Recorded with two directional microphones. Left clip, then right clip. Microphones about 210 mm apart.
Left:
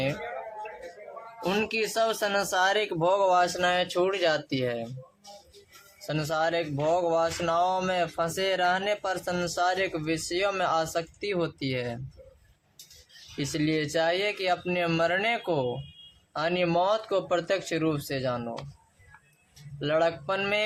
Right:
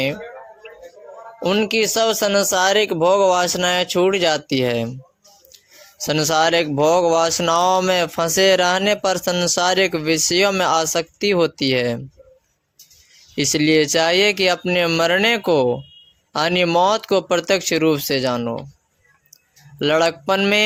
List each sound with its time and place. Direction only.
1.5 s speech: 30° right (ahead or behind)
6.1 s speech: 45° right (ahead or behind)
13.3 s speech: 45° right (ahead or behind)
19.8 s speech: 45° right (ahead or behind)